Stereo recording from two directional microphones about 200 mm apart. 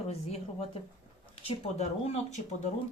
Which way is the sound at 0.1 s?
30° left (ahead or behind).